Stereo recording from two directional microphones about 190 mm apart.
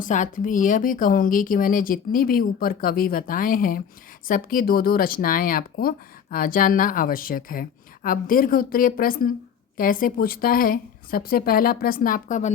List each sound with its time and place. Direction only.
0.0 s a woman's voice: 45° left (ahead or behind)